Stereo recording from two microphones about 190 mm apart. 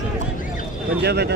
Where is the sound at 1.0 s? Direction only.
60° right (ahead or behind).